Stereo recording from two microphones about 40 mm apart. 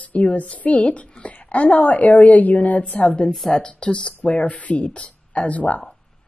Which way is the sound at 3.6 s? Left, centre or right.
Left.